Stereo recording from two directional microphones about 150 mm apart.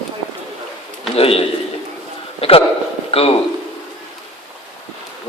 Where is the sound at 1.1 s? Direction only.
40° left (ahead or behind).